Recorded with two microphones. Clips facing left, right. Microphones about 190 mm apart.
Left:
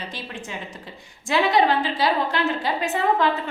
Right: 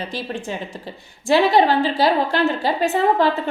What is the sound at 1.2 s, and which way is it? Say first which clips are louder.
A woman's voice: right 4 dB; 30° right (ahead or behind).